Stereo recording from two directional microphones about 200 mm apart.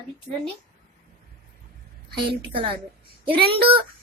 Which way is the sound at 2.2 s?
25° right (ahead or behind).